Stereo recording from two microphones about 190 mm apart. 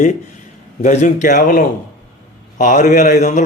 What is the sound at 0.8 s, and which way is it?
A man's voice, 40° left (ahead or behind).